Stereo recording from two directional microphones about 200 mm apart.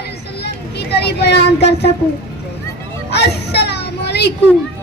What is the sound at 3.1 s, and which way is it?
A child's voice, 55° left (ahead or behind).